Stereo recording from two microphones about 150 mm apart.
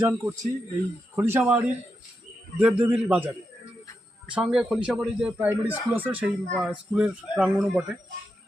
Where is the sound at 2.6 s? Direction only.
10° right (ahead or behind).